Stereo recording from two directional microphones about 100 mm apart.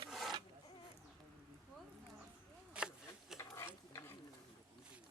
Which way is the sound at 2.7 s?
5° right (ahead or behind).